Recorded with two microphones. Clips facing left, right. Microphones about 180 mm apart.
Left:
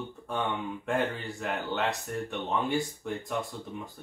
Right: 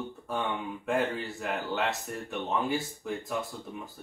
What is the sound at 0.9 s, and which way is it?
A man's voice, centre (ahead or behind).